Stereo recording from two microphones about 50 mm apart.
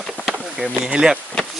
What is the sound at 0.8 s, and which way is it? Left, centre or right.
Speech, centre.